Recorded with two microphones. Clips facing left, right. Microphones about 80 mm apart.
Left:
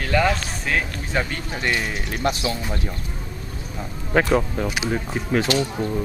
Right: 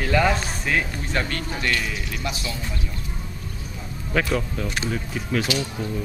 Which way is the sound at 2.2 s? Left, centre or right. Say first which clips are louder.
Left 10 dB; left.